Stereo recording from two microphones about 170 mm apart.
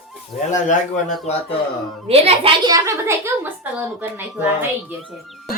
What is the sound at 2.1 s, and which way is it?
Speech, 35° right (ahead or behind).